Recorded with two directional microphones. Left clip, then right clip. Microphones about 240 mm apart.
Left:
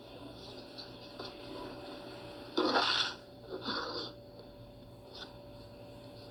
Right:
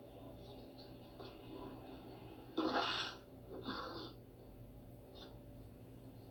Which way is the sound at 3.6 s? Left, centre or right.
Left.